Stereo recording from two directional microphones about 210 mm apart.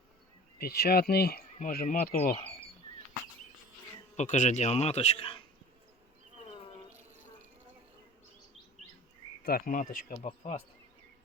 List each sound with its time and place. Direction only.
0.6 s speech: 50° left (ahead or behind)
4.2 s a man's voice: 35° left (ahead or behind)
9.4 s a man's voice: 45° left (ahead or behind)